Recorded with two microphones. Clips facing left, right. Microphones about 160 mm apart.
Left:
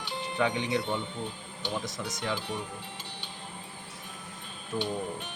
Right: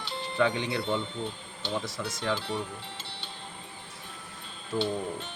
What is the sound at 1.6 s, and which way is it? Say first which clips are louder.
Speech: right 1 dB; 15° left (ahead or behind).